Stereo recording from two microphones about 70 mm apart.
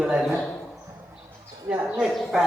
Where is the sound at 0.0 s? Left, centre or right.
Centre.